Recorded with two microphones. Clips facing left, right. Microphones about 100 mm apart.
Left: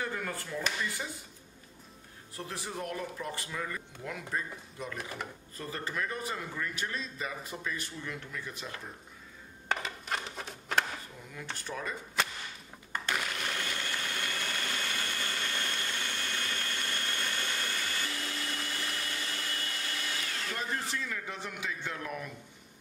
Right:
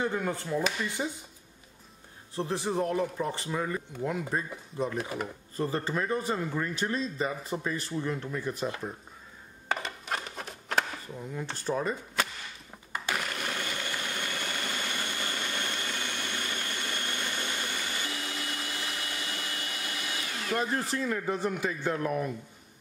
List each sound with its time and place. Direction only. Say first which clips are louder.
0.0 s speech: right 6 dB; 25° right (ahead or behind)
2.3 s a man's voice: right 10 dB; 30° right (ahead or behind)
9.7 s a sound: right 2 dB; centre (ahead or behind)
11.5 s a man's voice: right 8 dB; 30° right (ahead or behind)
12.9 s blender: right 1 dB; 5° right (ahead or behind)
20.9 s a man's voice: right 8 dB; 40° right (ahead or behind)